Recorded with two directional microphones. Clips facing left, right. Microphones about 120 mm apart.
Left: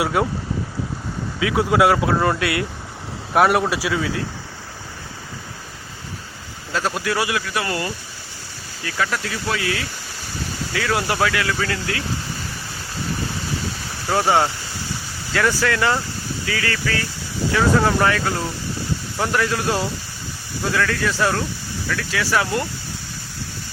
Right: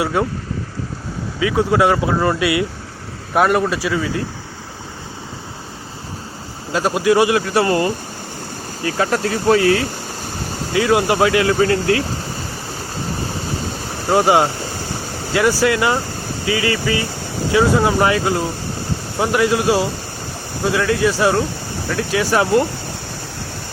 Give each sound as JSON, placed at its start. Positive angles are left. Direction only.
{"t": 0.0, "sound": "speech", "side_deg": 5}
{"t": 1.4, "sound": "speech", "side_deg": 5}
{"t": 6.7, "sound": "speech", "side_deg": -15}
{"t": 7.3, "sound": "speech", "side_deg": -35}
{"t": 10.8, "sound": "speech", "side_deg": -20}
{"t": 14.2, "sound": "speech", "side_deg": -15}
{"t": 14.4, "sound": "a sound", "side_deg": -45}
{"t": 15.3, "sound": "speech", "side_deg": -15}